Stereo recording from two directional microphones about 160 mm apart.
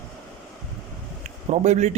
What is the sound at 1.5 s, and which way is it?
Speech, 45° right (ahead or behind).